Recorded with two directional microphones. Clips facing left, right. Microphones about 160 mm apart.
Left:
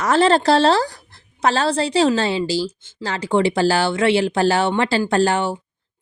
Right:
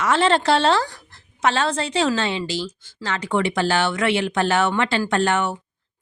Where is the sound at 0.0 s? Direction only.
40° left (ahead or behind).